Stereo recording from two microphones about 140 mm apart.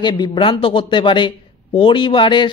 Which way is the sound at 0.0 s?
35° left (ahead or behind).